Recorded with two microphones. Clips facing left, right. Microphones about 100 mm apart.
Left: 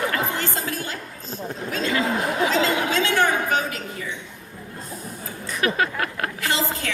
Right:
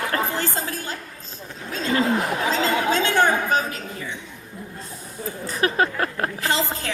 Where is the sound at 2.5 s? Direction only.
35° right (ahead or behind).